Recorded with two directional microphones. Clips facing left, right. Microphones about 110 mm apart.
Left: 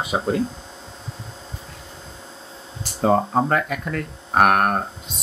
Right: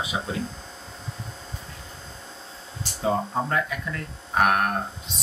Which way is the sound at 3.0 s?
55° left (ahead or behind).